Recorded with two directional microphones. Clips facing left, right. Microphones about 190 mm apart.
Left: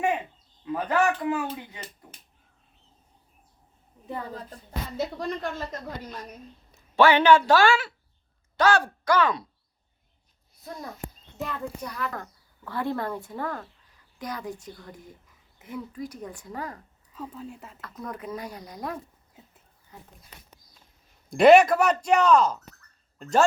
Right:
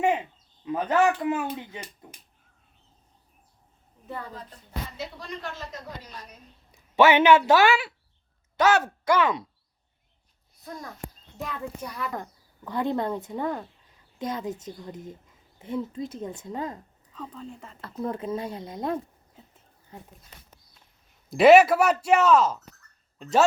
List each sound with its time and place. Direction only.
0.6 s a woman's voice: 20° right (ahead or behind)
4.0 s a woman's voice: 20° left (ahead or behind)
4.3 s music: 40° left (ahead or behind)
4.9 s speech: 50° left (ahead or behind)
6.7 s speech: 20° right (ahead or behind)
11.9 s a woman's voice: 15° right (ahead or behind)
17.2 s speech: 5° left (ahead or behind)
17.7 s a woman's voice: 30° right (ahead or behind)
21.2 s speech: 5° right (ahead or behind)